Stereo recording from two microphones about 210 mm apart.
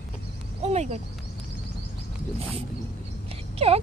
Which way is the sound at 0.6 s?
30° right (ahead or behind).